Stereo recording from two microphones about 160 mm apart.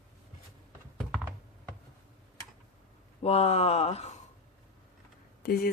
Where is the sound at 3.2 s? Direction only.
40° left (ahead or behind).